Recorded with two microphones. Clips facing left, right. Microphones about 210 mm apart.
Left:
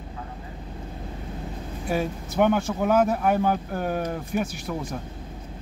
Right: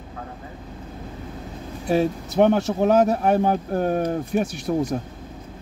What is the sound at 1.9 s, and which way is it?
Speech, 30° right (ahead or behind).